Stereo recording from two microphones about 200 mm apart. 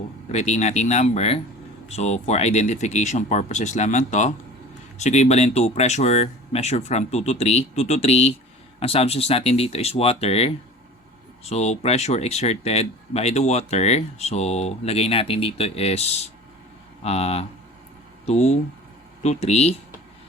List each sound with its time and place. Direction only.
0.3 s speech: 35° left (ahead or behind)